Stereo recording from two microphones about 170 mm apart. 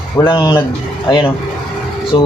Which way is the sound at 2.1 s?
25° left (ahead or behind).